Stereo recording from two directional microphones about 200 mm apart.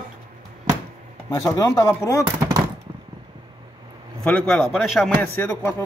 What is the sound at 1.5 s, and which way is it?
Speech, 15° left (ahead or behind).